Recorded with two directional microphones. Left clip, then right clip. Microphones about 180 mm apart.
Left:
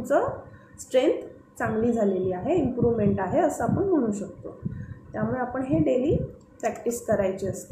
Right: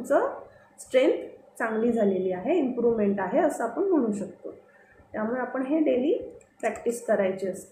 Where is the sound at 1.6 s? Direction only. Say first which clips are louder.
Even; 5° right (ahead or behind).